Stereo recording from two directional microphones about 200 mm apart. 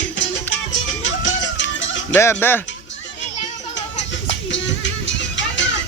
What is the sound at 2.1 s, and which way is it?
Speech, 10° left (ahead or behind).